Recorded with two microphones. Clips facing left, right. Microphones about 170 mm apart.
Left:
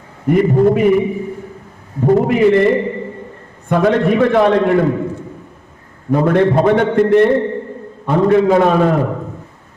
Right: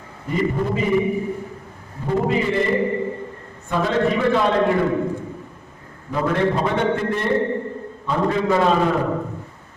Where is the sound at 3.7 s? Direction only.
60° left (ahead or behind).